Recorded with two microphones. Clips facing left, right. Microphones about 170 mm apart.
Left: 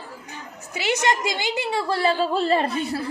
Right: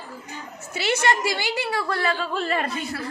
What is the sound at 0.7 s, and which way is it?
A woman's voice, 15° left (ahead or behind).